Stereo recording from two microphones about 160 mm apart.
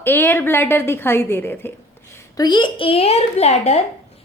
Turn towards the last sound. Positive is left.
turn(degrees=40)  # may be behind; listen again after turning